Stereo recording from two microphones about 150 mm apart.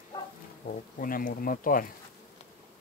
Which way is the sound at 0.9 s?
70° left (ahead or behind).